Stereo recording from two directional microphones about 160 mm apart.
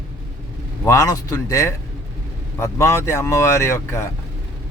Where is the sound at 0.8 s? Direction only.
20° left (ahead or behind).